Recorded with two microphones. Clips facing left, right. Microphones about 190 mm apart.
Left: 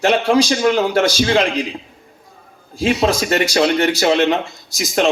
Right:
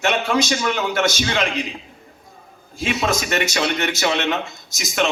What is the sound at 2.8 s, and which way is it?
A man's voice, 35° left (ahead or behind).